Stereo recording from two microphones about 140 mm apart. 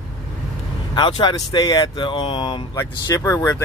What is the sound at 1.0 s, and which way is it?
Speech, 35° left (ahead or behind).